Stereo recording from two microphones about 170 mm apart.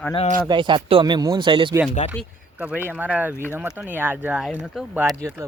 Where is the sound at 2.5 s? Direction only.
10° right (ahead or behind).